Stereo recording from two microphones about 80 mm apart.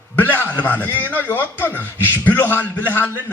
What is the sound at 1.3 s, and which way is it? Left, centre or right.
A man's voice, left.